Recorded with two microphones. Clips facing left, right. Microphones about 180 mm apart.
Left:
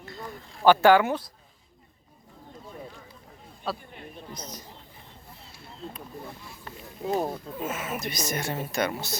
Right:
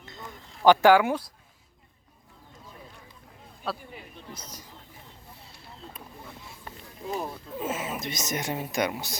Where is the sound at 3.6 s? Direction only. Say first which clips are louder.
Left 1 dB; 5° right (ahead or behind).